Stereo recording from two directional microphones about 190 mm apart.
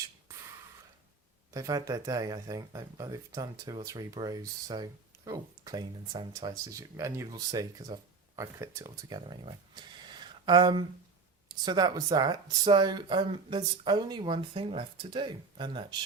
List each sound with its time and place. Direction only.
1.5 s speech: 15° right (ahead or behind)